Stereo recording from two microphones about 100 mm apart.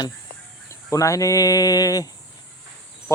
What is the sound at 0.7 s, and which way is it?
Speech, 30° left (ahead or behind).